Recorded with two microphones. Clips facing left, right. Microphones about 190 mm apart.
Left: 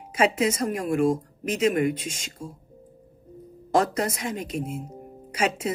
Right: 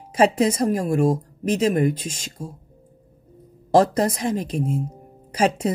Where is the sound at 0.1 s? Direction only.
35° right (ahead or behind).